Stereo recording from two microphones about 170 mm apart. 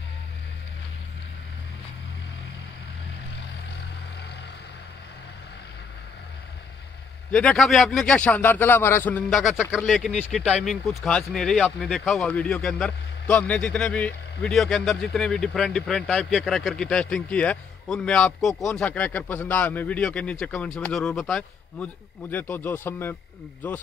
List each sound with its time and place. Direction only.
7.2 s speech: 5° left (ahead or behind)
18.5 s speech: 20° left (ahead or behind)
18.8 s a man's voice: 10° left (ahead or behind)